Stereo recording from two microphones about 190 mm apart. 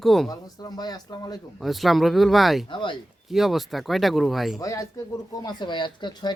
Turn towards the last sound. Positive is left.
turn(degrees=20)  # may be behind; listen again after turning